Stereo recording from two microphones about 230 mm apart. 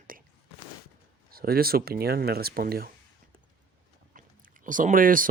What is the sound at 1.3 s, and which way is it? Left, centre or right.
Speech, right.